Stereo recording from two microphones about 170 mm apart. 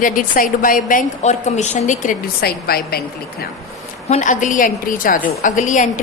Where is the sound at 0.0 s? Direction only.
55° left (ahead or behind).